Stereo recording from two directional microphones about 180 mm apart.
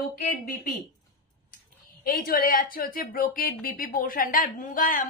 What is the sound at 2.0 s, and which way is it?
Speech, 55° left (ahead or behind).